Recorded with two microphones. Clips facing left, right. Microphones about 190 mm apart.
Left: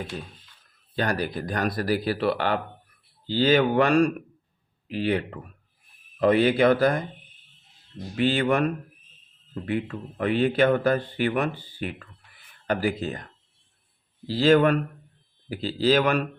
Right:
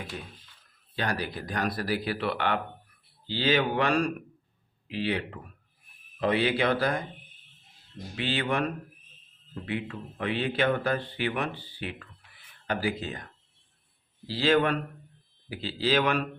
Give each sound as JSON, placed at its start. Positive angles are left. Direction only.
{"t": 0.9, "sound": "speech", "side_deg": 45}
{"t": 8.1, "sound": "speech", "side_deg": 45}
{"t": 9.9, "sound": "speech", "side_deg": 45}
{"t": 14.3, "sound": "speech", "side_deg": 45}